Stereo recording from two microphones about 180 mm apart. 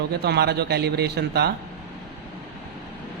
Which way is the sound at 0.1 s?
65° right (ahead or behind).